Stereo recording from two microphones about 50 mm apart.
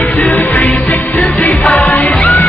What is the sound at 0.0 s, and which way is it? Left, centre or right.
Music, left.